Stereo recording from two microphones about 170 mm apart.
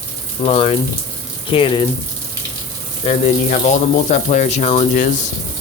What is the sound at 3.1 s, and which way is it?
Speech, 45° left (ahead or behind).